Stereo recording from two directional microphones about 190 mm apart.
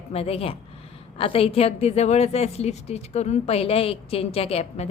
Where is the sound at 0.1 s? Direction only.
30° left (ahead or behind).